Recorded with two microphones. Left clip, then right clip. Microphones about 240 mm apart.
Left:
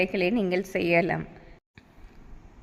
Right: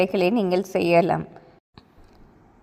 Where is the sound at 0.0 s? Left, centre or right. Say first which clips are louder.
Right 5 dB; centre.